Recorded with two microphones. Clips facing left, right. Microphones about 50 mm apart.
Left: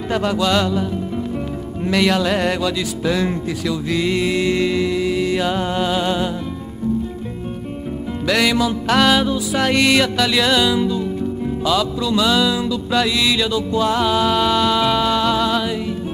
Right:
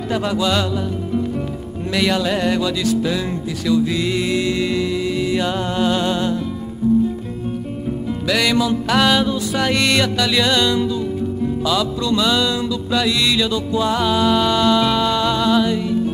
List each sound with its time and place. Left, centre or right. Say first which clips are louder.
0.1 s music: left 1 dB; centre
1.9 s music: left 2 dB; centre
8.3 s music: even; centre